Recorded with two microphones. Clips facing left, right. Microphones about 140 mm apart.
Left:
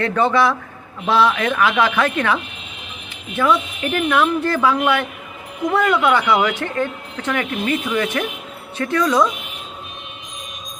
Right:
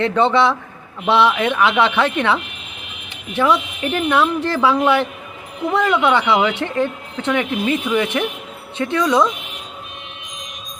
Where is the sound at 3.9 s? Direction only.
25° right (ahead or behind).